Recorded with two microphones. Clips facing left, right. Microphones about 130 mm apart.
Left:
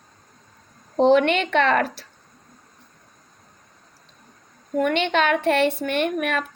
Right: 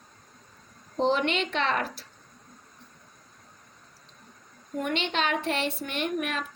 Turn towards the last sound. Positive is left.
turn(degrees=60)  # may be behind; listen again after turning